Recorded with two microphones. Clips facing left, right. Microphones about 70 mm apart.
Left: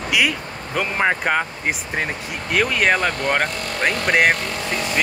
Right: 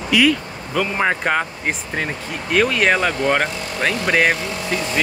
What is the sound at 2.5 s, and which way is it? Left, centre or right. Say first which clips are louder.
Speech: right 2 dB; centre.